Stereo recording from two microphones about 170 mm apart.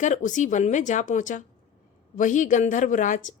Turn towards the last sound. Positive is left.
turn(degrees=45)  # may be behind; listen again after turning